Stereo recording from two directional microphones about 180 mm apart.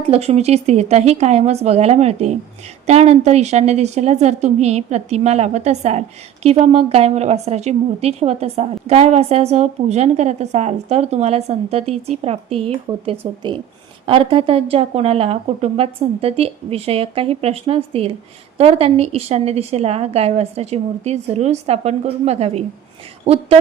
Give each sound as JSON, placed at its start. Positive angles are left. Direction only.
{"t": 0.1, "sound": "a woman's voice", "side_deg": -35}